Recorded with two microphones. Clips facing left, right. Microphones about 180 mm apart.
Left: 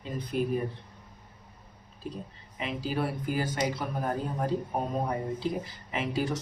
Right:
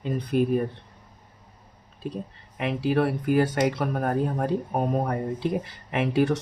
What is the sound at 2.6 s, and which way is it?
Speech, 65° right (ahead or behind).